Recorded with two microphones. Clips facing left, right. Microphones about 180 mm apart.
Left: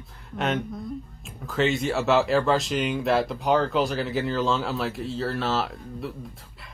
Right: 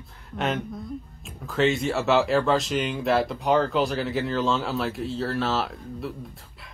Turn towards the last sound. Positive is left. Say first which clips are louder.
# even
turn(degrees=0)  # may be behind; listen again after turning